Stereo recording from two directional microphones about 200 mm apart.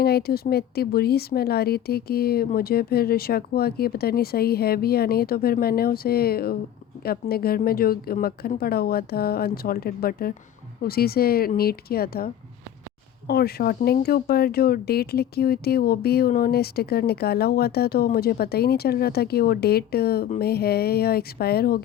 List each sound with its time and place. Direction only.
0.0 s speech: 50° left (ahead or behind)